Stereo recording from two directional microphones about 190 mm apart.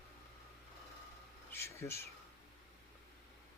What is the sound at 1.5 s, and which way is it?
Speech, 15° left (ahead or behind).